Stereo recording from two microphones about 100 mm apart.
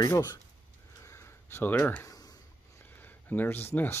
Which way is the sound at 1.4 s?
20° left (ahead or behind).